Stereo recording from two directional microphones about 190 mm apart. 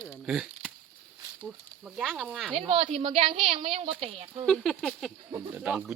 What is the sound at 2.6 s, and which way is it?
A woman's voice, 30° right (ahead or behind).